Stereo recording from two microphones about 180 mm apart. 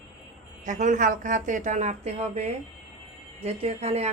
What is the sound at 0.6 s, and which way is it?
Speech, 45° right (ahead or behind).